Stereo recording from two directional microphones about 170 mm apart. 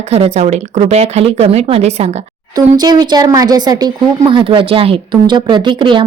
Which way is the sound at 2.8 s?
25° right (ahead or behind).